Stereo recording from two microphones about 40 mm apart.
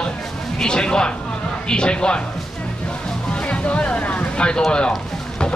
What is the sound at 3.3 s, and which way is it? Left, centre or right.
Speech, left.